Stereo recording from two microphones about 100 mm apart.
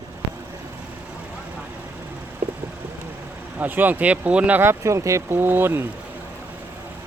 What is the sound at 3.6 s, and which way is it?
Speech, 20° right (ahead or behind).